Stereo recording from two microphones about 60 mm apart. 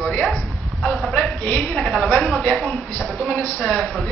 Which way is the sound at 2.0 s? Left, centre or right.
Centre.